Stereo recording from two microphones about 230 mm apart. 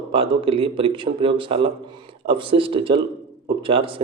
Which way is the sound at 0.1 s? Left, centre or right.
Right.